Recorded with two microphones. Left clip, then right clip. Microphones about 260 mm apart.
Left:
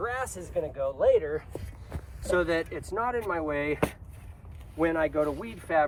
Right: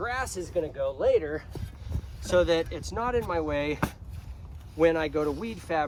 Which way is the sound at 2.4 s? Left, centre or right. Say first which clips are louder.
Right 6 dB; right.